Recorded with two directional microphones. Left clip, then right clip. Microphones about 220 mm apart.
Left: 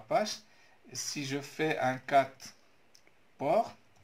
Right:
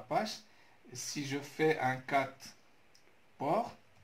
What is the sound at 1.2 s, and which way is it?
Speech, 40° left (ahead or behind).